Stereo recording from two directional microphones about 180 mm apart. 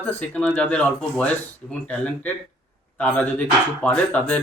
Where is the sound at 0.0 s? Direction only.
10° left (ahead or behind).